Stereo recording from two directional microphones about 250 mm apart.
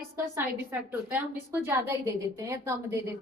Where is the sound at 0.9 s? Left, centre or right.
Centre.